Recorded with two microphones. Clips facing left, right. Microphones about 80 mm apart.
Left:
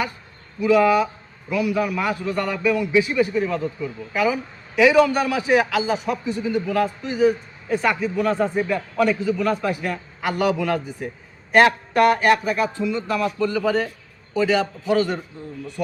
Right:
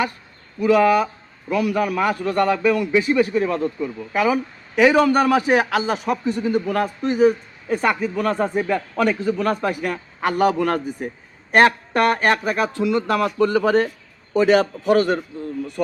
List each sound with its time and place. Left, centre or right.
1.5 s a man's voice: right
2.9 s speech: right
3.2 s a man's voice: right
12.7 s a man's voice: right